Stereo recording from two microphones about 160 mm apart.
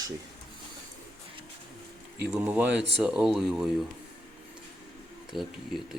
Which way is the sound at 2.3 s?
10° right (ahead or behind).